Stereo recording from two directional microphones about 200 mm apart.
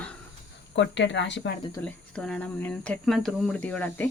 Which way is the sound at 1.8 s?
5° left (ahead or behind).